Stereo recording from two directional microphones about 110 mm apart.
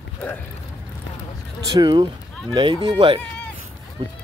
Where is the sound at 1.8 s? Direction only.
40° right (ahead or behind).